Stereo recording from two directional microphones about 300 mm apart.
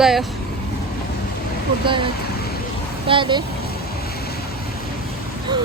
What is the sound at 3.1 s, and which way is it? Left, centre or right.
Speech, centre.